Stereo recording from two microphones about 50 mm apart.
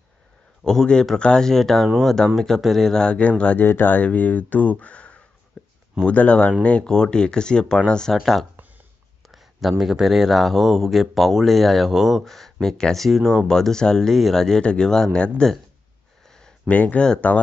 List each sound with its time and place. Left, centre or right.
0.7 s speech: centre
3.0 s speech: left
3.5 s speech: left
5.5 s a sound: centre
6.0 s speech: left
9.3 s speech: centre
12.3 s speech: centre
16.3 s a sound: centre
16.6 s speech: left